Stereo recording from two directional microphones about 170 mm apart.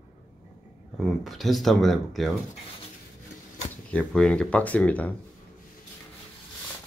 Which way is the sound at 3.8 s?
5° left (ahead or behind).